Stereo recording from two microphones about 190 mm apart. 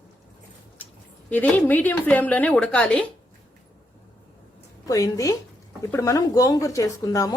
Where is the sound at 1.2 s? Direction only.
10° left (ahead or behind).